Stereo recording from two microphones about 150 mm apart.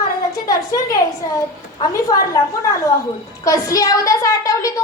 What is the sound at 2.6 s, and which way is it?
A woman's voice, 20° left (ahead or behind).